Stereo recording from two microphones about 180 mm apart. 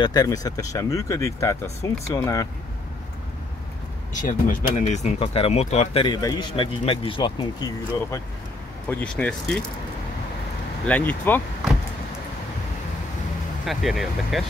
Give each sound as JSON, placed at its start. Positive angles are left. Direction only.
{"t": 0.0, "sound": "speech", "side_deg": 20}
{"t": 4.3, "sound": "speech", "side_deg": 45}
{"t": 6.0, "sound": "speech", "side_deg": 25}
{"t": 8.8, "sound": "speech", "side_deg": 5}
{"t": 10.9, "sound": "speech", "side_deg": 10}
{"t": 13.7, "sound": "speech", "side_deg": 0}